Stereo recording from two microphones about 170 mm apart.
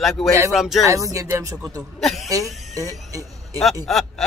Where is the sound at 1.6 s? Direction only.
Centre (ahead or behind).